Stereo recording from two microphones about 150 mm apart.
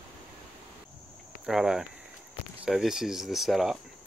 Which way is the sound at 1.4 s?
5° right (ahead or behind).